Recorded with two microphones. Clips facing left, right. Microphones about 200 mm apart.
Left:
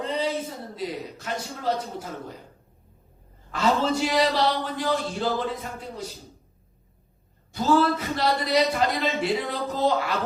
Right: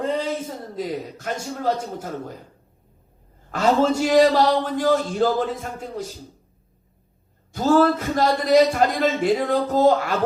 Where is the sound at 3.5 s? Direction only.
45° right (ahead or behind).